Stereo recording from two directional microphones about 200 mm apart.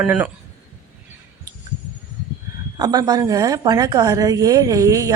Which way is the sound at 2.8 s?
20° right (ahead or behind).